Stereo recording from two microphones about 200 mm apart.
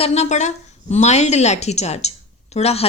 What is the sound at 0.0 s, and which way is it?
A woman's voice, 35° left (ahead or behind).